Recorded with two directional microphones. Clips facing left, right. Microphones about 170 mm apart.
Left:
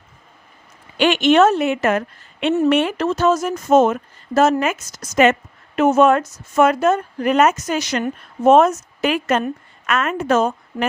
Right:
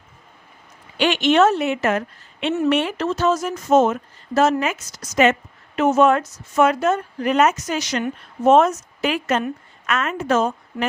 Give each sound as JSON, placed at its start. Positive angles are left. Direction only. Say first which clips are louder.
{"t": 0.9, "sound": "a woman's voice", "louder": "left 3 dB", "side_deg": 50}